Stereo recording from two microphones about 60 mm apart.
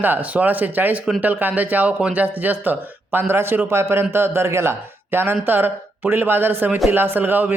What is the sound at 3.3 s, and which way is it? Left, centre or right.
A man's voice, right.